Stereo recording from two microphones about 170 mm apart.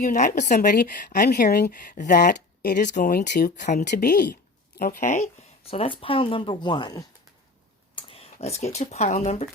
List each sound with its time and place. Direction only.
0.0 s a woman's voice: 50° left (ahead or behind)
3.8 s speech: 65° left (ahead or behind); by 9.5 s 40° left (ahead or behind)